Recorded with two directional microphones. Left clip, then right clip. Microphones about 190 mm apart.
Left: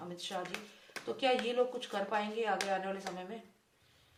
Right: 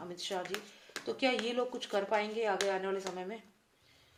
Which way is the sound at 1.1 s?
40° right (ahead or behind).